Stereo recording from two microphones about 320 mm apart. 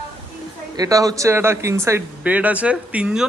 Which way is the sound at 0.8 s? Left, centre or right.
Centre.